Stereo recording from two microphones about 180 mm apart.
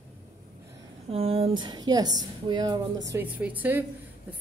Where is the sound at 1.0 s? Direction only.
35° right (ahead or behind).